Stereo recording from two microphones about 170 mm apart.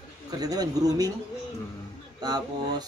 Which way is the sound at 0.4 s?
20° right (ahead or behind).